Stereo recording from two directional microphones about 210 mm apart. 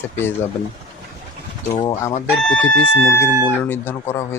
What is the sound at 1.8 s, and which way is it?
Speech, 20° left (ahead or behind).